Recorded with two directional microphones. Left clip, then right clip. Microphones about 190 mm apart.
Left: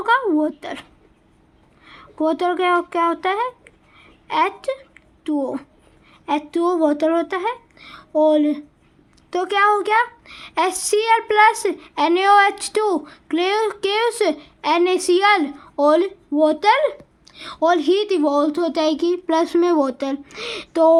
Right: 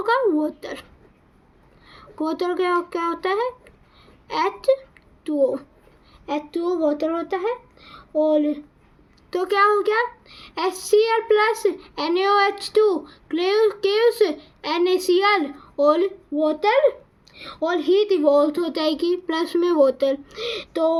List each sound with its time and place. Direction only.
0.0 s a sound: 30° left (ahead or behind)
1.8 s a child's voice: 25° left (ahead or behind)
6.2 s speech: 45° left (ahead or behind)
9.3 s a woman's voice: 25° left (ahead or behind)